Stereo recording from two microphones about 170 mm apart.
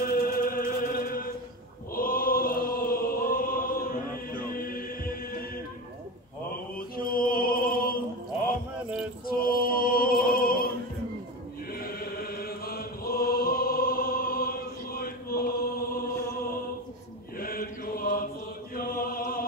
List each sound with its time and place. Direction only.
0.0 s chant: 60° left (ahead or behind)
7.2 s music: 55° left (ahead or behind)
9.3 s music: 60° left (ahead or behind)
11.8 s chant: 60° left (ahead or behind)
17.4 s mantra: 60° left (ahead or behind)
18.8 s a sound: 60° left (ahead or behind)